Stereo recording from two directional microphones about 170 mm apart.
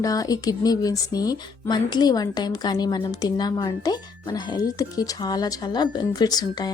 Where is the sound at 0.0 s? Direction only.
20° left (ahead or behind).